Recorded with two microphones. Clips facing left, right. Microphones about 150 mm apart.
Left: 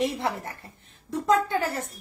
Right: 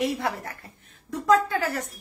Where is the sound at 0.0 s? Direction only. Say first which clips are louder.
Even; 25° left (ahead or behind).